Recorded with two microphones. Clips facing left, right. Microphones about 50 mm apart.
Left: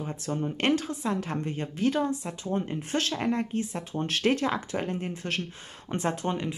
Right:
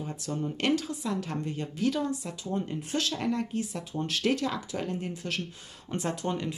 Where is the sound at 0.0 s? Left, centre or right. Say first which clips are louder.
Left 2 dB; left.